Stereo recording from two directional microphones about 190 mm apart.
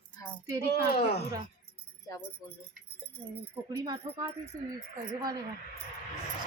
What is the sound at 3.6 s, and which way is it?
Speech, 15° right (ahead or behind).